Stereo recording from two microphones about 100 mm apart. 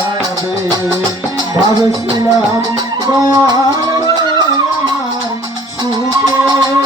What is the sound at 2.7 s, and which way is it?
Music, 40° right (ahead or behind).